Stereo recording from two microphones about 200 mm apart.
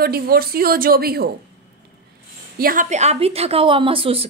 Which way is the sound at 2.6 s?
45° right (ahead or behind).